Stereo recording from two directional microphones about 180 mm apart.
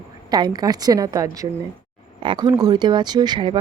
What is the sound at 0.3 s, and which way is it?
Speech, 25° right (ahead or behind).